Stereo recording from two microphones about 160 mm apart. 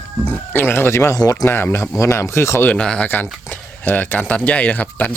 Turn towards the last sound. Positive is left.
turn(degrees=10)  # may be behind; listen again after turning